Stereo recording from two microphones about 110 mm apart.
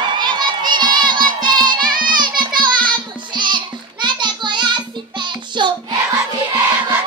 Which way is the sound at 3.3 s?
45° right (ahead or behind).